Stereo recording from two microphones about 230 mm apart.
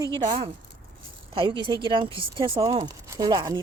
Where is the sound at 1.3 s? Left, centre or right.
Right.